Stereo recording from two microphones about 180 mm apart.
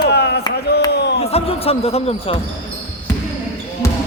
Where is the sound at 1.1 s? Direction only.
35° left (ahead or behind).